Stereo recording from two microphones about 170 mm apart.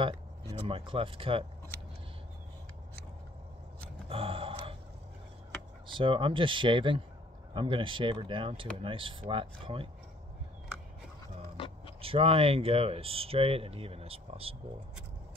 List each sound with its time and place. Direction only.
0.0 s speech: 30° right (ahead or behind)
4.1 s gasp: 35° right (ahead or behind)
5.9 s speech: 30° right (ahead or behind)
11.5 s a sound: 35° left (ahead or behind)
12.0 s speech: 35° right (ahead or behind)